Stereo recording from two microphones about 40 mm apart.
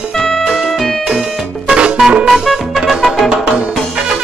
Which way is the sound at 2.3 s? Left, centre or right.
Centre.